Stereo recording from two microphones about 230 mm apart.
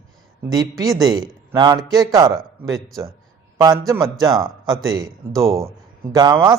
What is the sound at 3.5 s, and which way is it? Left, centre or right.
A man's voice, centre.